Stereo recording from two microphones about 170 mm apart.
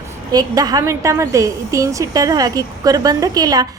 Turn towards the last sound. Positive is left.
turn(degrees=-20)  # may be behind; listen again after turning